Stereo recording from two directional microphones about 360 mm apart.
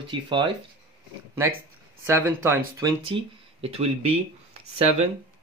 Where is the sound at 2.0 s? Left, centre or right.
Centre.